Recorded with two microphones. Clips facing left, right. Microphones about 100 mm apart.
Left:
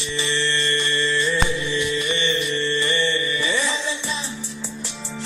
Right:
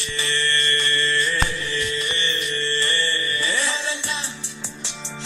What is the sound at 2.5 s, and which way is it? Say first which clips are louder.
Mantra: left 3 dB; 15° left (ahead or behind).